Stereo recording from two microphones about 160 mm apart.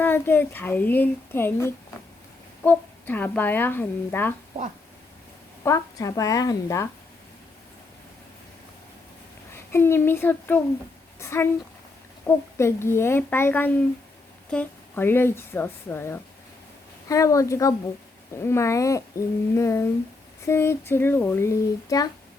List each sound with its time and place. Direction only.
0.0 s speech: 10° left (ahead or behind)
5.6 s a woman's voice: 20° left (ahead or behind)
9.5 s a woman's voice: 15° left (ahead or behind)